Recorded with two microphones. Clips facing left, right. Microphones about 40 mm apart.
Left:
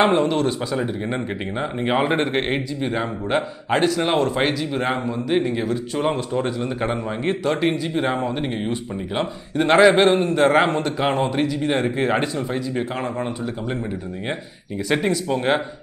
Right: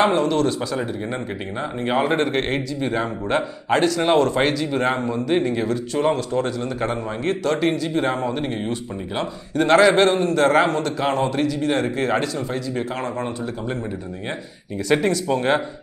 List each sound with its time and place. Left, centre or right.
0.0 s speech: centre
14.9 s speech: centre